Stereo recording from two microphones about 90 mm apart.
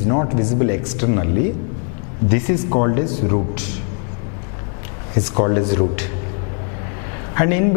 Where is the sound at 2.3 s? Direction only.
15° left (ahead or behind).